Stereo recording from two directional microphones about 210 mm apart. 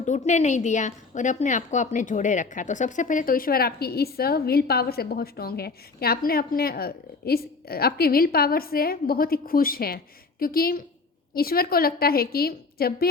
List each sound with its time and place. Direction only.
0.3 s a woman's voice: 35° left (ahead or behind)